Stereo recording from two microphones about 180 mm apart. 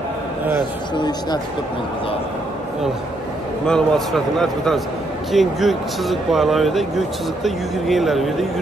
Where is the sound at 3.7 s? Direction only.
5° left (ahead or behind).